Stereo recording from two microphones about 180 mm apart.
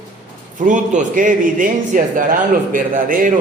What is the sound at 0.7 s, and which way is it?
A man's voice, 45° right (ahead or behind).